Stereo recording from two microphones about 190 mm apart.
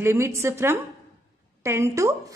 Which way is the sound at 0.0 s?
15° right (ahead or behind).